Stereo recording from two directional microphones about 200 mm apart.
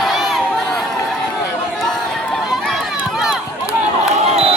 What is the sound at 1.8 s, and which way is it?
Run, centre (ahead or behind).